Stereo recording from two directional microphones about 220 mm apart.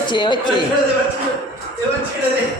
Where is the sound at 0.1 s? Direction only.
20° left (ahead or behind).